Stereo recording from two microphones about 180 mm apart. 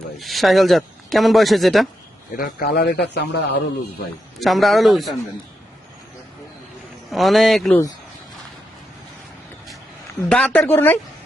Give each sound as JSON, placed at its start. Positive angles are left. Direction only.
{"t": 0.2, "sound": "speech", "side_deg": 0}
{"t": 2.3, "sound": "speech", "side_deg": 55}
{"t": 4.4, "sound": "speech", "side_deg": 0}
{"t": 7.1, "sound": "speech", "side_deg": 0}
{"t": 10.2, "sound": "speech", "side_deg": 5}